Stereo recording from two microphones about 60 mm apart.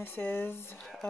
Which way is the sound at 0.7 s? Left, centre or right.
Centre.